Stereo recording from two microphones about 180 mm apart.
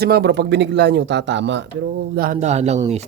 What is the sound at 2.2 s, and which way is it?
Speech, 45° right (ahead or behind).